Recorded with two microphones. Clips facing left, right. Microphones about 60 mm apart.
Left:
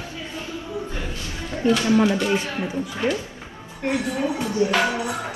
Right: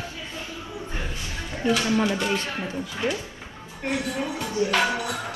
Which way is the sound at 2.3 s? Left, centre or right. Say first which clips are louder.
Left 4 dB; centre.